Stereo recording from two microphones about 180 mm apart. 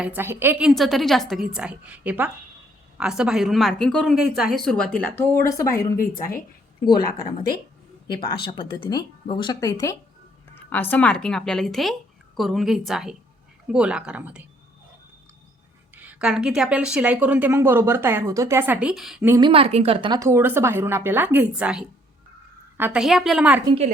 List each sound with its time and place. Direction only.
0.0 s speech: 10° right (ahead or behind)
0.7 s speech: centre (ahead or behind)
16.0 s speech: 5° right (ahead or behind)
19.4 s speech: 30° right (ahead or behind); by 23.6 s 5° right (ahead or behind)